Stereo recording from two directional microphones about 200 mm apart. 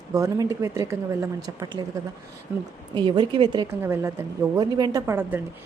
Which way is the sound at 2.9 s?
25° right (ahead or behind).